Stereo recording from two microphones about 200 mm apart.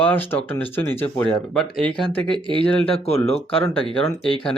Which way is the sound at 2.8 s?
30° left (ahead or behind).